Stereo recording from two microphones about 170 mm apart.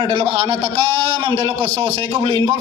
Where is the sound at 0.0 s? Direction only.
25° right (ahead or behind).